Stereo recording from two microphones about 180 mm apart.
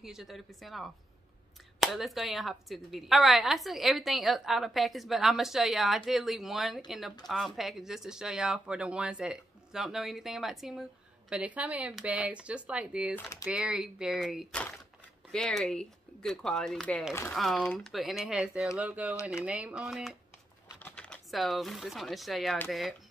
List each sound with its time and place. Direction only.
0.0 s speech: centre (ahead or behind)
13.1 s speech: 15° left (ahead or behind)
13.5 s speech: 5° right (ahead or behind)